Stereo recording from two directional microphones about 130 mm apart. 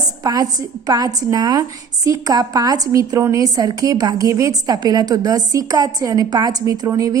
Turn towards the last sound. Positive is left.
turn(degrees=-25)  # may be behind; listen again after turning